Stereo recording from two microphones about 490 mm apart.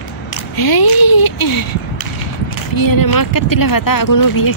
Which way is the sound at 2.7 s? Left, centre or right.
Left.